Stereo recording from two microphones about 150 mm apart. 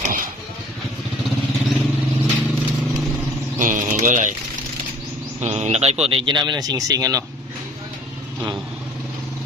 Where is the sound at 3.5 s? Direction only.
60° right (ahead or behind).